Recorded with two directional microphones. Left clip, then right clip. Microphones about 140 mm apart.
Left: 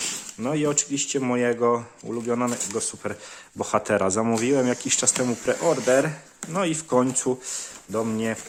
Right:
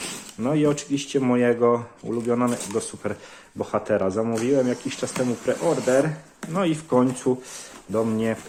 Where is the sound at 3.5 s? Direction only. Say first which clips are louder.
Left 1 dB; 50° left (ahead or behind).